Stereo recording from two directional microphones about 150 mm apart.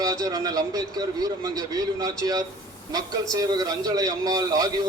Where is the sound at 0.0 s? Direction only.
25° right (ahead or behind).